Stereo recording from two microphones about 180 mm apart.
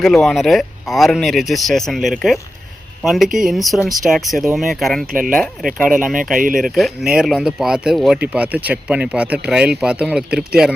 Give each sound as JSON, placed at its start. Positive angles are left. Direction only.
{"t": 0.0, "sound": "speech", "side_deg": 5}
{"t": 6.3, "sound": "speech", "side_deg": -50}
{"t": 6.6, "sound": "speech", "side_deg": 0}